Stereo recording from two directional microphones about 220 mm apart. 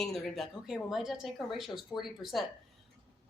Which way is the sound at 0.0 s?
Centre (ahead or behind).